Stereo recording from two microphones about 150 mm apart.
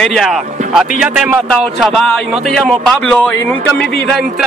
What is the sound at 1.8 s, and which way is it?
Speech, centre (ahead or behind).